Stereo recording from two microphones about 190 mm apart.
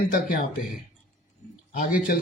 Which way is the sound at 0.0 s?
50° left (ahead or behind).